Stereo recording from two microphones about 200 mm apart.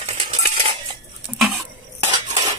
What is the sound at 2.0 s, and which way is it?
Cutlery, 30° right (ahead or behind).